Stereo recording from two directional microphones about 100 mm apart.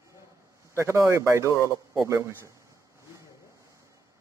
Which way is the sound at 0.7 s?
25° right (ahead or behind).